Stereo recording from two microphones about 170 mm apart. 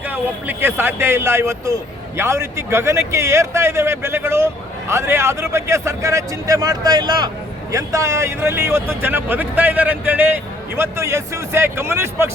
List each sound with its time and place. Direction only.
0.1 s speech: 10° right (ahead or behind)